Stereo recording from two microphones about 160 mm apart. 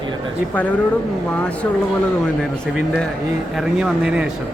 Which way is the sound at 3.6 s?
5° right (ahead or behind).